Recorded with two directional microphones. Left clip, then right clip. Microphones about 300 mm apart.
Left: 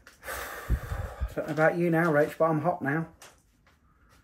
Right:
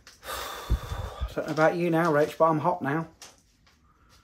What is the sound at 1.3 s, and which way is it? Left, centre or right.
Speech, centre.